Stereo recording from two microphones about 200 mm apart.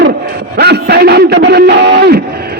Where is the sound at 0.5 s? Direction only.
55° right (ahead or behind).